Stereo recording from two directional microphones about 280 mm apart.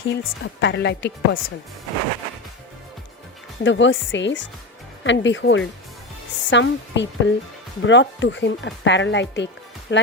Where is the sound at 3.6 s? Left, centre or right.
Left.